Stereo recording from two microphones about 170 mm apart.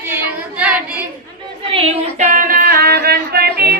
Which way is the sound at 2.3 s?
55° right (ahead or behind).